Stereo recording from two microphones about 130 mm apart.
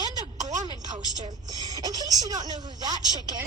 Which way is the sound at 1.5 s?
30° right (ahead or behind).